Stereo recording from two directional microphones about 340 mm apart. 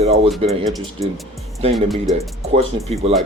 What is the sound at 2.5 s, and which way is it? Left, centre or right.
Speech, centre.